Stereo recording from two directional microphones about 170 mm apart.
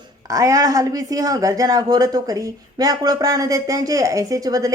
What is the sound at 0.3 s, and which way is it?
Speech, 20° right (ahead or behind).